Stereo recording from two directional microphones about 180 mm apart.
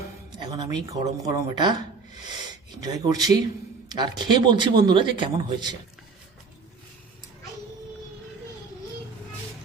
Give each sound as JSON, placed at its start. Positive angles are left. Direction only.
{"t": 0.3, "sound": "speech", "side_deg": -25}
{"t": 2.8, "sound": "speech", "side_deg": -20}